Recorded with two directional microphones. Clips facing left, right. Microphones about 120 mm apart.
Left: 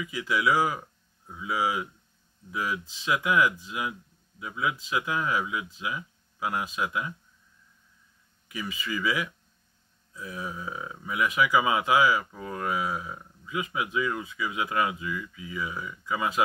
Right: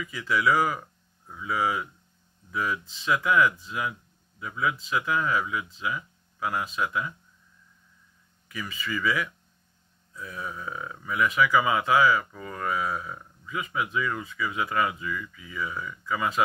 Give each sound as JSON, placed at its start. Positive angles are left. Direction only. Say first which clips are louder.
{"t": 0.0, "sound": "speech", "louder": "right 1 dB", "side_deg": 15}
{"t": 8.5, "sound": "speech", "louder": "even", "side_deg": 15}